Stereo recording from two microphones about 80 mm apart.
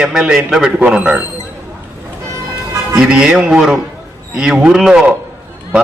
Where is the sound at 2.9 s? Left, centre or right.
Centre.